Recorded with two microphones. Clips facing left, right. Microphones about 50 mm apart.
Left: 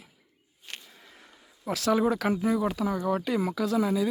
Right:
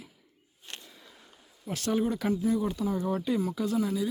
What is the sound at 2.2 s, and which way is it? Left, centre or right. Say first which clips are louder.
Speech: left 2 dB; left.